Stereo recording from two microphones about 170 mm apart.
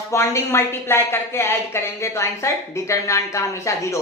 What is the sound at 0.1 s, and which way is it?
A woman's voice, 15° left (ahead or behind).